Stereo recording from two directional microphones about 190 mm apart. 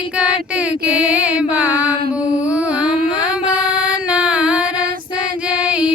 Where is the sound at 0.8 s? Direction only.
5° right (ahead or behind).